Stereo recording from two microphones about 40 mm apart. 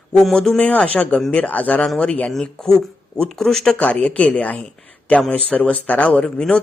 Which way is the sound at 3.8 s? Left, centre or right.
Left.